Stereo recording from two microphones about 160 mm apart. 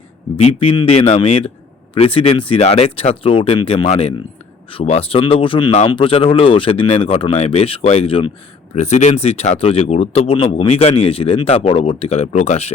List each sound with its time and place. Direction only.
0.3 s speech: 35° left (ahead or behind)